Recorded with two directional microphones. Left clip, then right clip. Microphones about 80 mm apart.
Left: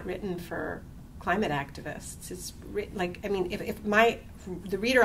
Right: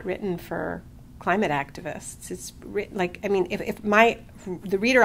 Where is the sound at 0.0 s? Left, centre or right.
Right.